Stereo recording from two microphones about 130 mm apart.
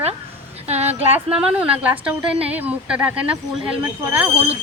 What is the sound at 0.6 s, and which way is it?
Speech, 55° right (ahead or behind).